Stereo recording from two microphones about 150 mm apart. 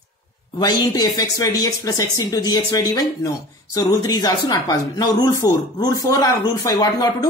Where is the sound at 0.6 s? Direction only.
25° left (ahead or behind).